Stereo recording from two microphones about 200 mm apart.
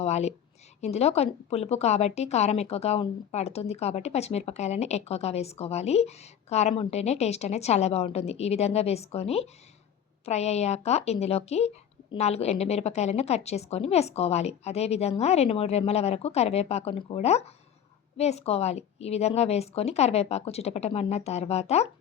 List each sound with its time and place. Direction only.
0.0 s a woman's voice: 35° left (ahead or behind)